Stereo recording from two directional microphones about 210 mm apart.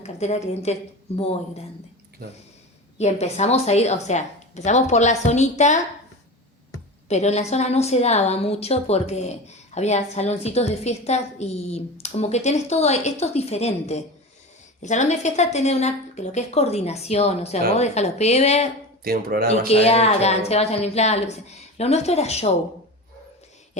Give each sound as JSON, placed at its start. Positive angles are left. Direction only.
{"t": 0.0, "sound": "a woman's voice", "side_deg": 30}
{"t": 3.0, "sound": "a woman's voice", "side_deg": 30}
{"t": 7.1, "sound": "a woman's voice", "side_deg": 30}
{"t": 19.0, "sound": "speech", "side_deg": -45}
{"t": 19.6, "sound": "a woman's voice", "side_deg": 30}